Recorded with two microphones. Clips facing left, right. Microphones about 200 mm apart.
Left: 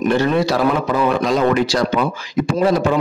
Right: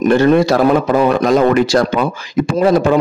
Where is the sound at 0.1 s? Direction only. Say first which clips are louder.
Right 7 dB; 50° right (ahead or behind).